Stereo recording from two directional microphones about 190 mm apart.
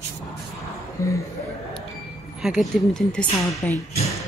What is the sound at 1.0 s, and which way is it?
Speech, 15° left (ahead or behind).